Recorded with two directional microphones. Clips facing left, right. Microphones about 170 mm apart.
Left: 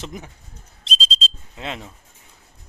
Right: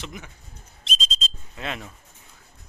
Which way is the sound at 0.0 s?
40° left (ahead or behind).